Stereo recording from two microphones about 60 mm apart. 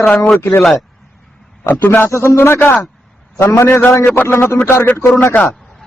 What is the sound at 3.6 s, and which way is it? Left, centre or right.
Speech, left.